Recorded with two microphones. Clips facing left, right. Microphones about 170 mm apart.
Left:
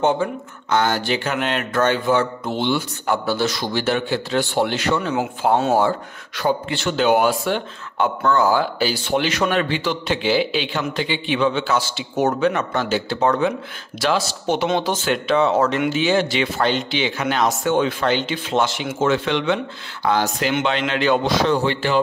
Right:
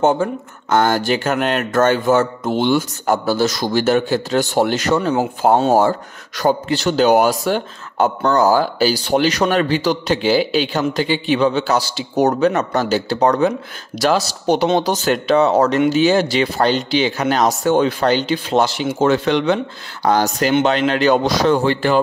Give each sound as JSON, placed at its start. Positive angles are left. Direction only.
{"t": 0.0, "sound": "speech", "side_deg": -45}